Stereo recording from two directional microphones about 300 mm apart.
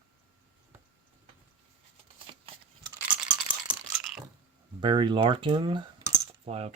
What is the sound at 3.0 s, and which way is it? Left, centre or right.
Rattle, centre.